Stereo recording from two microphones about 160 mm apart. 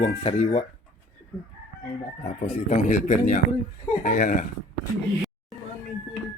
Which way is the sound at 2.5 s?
50° left (ahead or behind).